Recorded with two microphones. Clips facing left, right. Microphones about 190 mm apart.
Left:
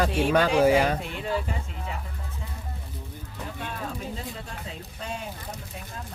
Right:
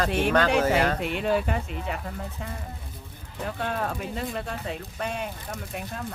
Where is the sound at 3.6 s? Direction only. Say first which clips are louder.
Right 5 dB; 65° right (ahead or behind).